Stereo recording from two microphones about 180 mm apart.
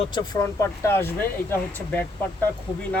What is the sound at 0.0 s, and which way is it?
Speech, 25° left (ahead or behind).